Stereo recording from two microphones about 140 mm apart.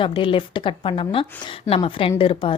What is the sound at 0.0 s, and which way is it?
A woman's voice, 40° left (ahead or behind).